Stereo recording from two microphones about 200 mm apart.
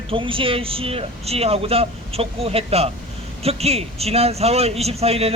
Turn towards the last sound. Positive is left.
turn(degrees=-30)  # may be behind; listen again after turning